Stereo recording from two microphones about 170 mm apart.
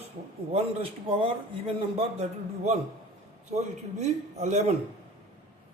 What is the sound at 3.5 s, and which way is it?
A man's voice, 40° right (ahead or behind).